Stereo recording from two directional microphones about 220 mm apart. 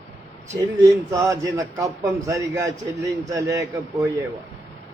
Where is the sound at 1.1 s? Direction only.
15° right (ahead or behind).